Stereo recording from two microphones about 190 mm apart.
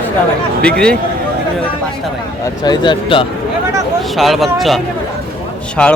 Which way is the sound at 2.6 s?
25° left (ahead or behind).